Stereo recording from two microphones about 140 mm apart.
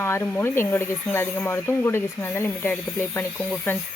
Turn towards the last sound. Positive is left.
turn(degrees=15)  # may be behind; listen again after turning